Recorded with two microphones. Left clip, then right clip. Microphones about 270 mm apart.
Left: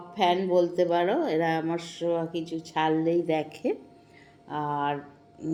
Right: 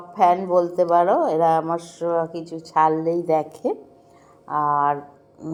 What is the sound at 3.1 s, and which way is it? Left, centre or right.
Speech, right.